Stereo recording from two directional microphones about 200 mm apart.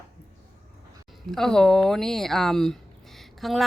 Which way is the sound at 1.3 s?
Centre (ahead or behind).